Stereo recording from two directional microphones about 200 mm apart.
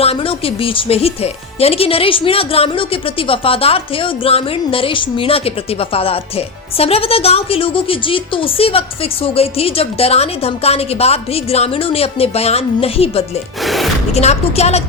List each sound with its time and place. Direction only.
0.0 s speech: 30° left (ahead or behind)
13.6 s speech: centre (ahead or behind)
14.1 s a woman's voice: 30° left (ahead or behind)